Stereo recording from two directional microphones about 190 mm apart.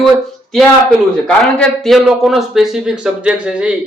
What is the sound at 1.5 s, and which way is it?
A man's voice, centre (ahead or behind).